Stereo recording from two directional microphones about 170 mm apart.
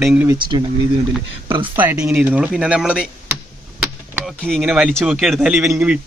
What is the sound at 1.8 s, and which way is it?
A man's voice, 15° right (ahead or behind).